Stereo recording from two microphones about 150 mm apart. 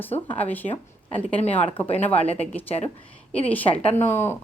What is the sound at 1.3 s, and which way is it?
Speech, 45° left (ahead or behind).